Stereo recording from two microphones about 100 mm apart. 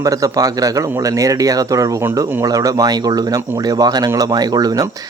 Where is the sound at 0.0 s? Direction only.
35° right (ahead or behind).